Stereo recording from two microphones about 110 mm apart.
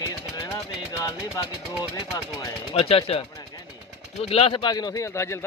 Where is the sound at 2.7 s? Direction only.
60° left (ahead or behind).